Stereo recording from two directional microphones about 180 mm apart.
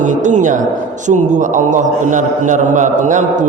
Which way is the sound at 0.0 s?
40° right (ahead or behind).